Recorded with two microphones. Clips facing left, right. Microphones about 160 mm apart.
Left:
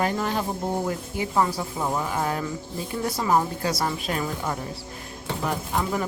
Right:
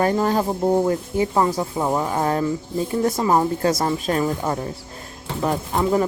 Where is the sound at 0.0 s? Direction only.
40° right (ahead or behind).